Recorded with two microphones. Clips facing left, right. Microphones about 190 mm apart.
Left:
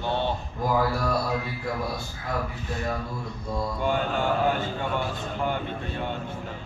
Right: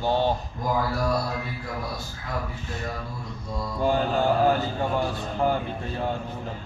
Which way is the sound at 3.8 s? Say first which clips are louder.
Right 4 dB; 35° right (ahead or behind).